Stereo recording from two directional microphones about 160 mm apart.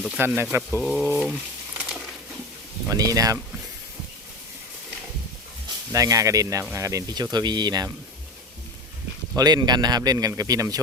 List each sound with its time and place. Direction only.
0.2 s speech: 15° right (ahead or behind)
0.8 s speech: centre (ahead or behind)
2.9 s speech: 20° right (ahead or behind)
5.6 s speech: 20° right (ahead or behind)
9.3 s speech: 25° right (ahead or behind)